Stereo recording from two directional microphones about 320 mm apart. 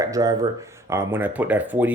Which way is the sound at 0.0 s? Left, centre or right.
Centre.